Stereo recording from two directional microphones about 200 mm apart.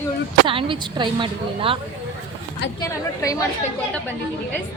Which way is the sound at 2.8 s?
15° left (ahead or behind).